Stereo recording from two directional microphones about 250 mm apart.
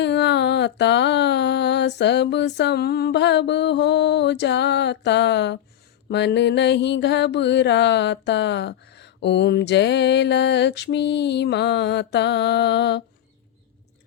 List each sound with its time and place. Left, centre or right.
0.0 s mantra: left